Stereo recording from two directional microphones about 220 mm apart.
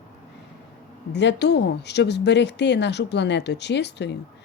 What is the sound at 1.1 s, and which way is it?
Speech, 50° left (ahead or behind).